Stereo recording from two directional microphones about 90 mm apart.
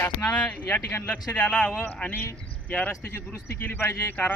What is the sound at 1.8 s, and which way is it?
Speech, 20° left (ahead or behind).